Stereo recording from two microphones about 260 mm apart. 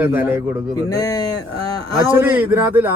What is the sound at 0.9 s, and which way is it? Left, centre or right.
Speech, centre.